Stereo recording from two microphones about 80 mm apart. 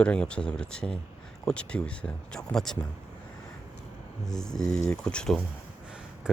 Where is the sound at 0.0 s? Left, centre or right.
Centre.